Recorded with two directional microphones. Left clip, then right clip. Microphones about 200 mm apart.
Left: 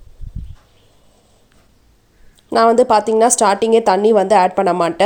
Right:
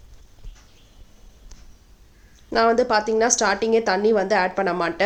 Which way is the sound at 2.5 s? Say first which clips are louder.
Left 7 dB; 30° left (ahead or behind).